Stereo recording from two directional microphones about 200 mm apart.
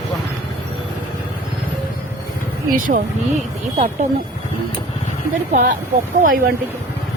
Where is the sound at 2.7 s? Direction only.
45° right (ahead or behind).